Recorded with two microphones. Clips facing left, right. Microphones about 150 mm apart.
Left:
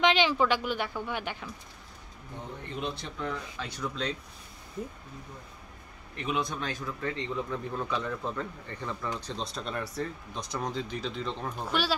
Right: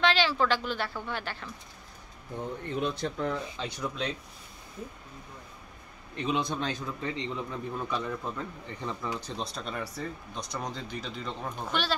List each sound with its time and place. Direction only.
0.0 s a woman's voice: 15° left (ahead or behind)
2.8 s speech: 45° right (ahead or behind)
3.5 s speech: 15° right (ahead or behind)
6.1 s a man's voice: 30° right (ahead or behind); by 11.9 s 5° left (ahead or behind)